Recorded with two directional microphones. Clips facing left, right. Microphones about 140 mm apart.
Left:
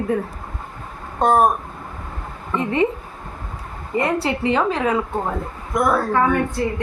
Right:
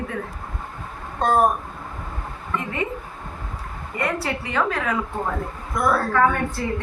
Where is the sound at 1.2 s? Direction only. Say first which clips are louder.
Left 4 dB; 20° left (ahead or behind).